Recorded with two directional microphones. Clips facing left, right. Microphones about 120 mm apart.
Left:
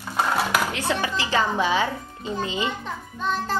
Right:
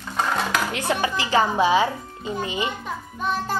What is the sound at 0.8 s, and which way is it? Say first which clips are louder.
A woman's voice: right 2 dB; 15° right (ahead or behind).